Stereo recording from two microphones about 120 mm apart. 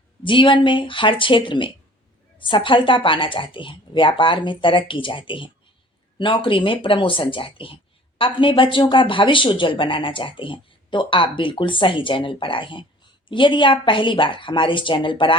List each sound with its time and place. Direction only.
0.2 s speech: 45° left (ahead or behind)